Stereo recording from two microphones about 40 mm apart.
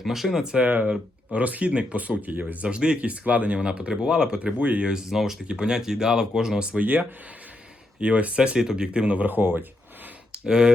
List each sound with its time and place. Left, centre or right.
0.0 s speech: centre
0.6 s speech: right
2.6 s speech: right
3.1 s speech: right
3.6 s speech: right
4.5 s speech: right
4.9 s speech: centre
5.5 s speech: right
6.7 s speech: right
7.9 s speech: right
8.5 s speech: centre
9.2 s speech: right
10.4 s speech: centre